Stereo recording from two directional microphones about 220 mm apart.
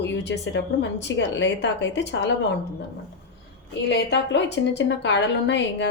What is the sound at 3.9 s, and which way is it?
A woman's voice, 50° left (ahead or behind).